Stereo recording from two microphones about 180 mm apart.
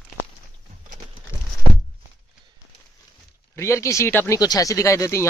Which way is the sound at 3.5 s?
15° left (ahead or behind).